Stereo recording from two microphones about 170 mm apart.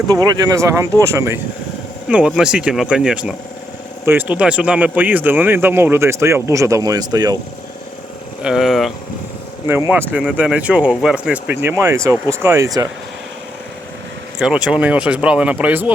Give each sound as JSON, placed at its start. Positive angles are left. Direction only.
{"t": 0.1, "sound": "speech", "side_deg": -20}
{"t": 2.0, "sound": "speech", "side_deg": -5}
{"t": 8.4, "sound": "speech", "side_deg": -5}
{"t": 9.6, "sound": "speech", "side_deg": -15}
{"t": 14.3, "sound": "speech", "side_deg": -5}